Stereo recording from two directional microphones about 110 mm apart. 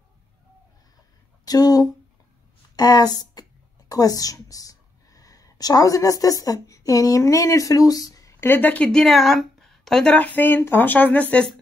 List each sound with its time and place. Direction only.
1.4 s a woman's voice: 35° left (ahead or behind); by 11.5 s 10° left (ahead or behind)